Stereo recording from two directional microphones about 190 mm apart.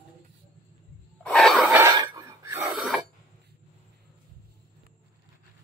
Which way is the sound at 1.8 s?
15° right (ahead or behind).